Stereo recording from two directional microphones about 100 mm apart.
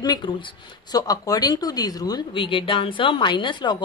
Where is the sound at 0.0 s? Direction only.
45° left (ahead or behind).